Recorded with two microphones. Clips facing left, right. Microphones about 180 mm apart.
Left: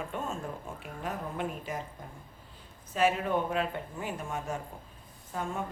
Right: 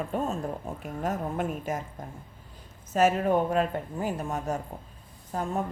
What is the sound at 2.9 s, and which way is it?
A woman's voice, 45° right (ahead or behind).